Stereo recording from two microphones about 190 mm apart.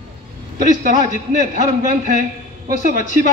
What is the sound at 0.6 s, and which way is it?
A man's voice, 40° right (ahead or behind).